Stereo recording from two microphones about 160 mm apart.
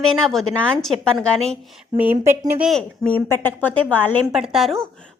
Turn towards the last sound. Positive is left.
turn(degrees=0)  # may be behind; listen again after turning